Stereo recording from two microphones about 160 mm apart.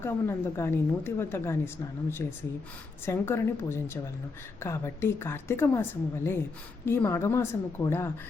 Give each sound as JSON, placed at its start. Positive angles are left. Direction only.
{"t": 0.0, "sound": "a woman's voice", "side_deg": 15}